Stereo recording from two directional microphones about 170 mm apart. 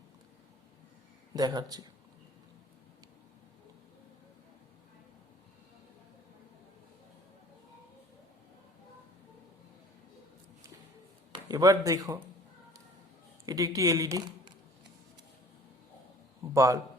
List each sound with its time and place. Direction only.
1.3 s speech: 25° right (ahead or behind)
11.3 s speech: 25° right (ahead or behind)
13.4 s speech: 20° right (ahead or behind)
16.6 s speech: 20° right (ahead or behind)